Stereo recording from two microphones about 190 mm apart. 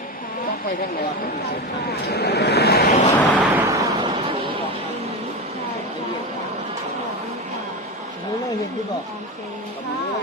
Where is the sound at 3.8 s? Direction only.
25° right (ahead or behind).